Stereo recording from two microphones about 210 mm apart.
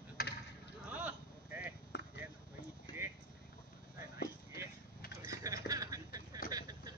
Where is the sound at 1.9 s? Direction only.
55° left (ahead or behind).